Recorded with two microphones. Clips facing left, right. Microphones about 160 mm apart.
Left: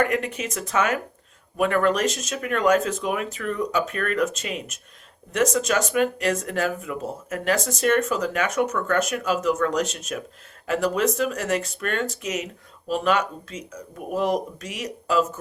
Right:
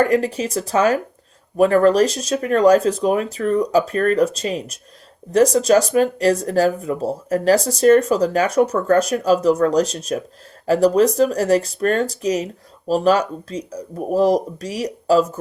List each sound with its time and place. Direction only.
0.0 s speech: 35° right (ahead or behind)